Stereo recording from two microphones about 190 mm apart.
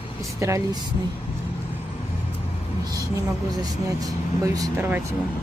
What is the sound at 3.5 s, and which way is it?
Speech, 20° right (ahead or behind).